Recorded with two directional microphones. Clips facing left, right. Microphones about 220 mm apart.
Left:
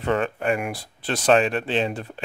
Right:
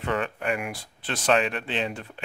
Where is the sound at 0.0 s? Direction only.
35° left (ahead or behind).